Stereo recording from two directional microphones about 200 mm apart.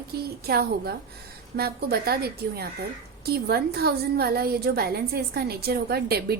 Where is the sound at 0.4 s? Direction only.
50° right (ahead or behind).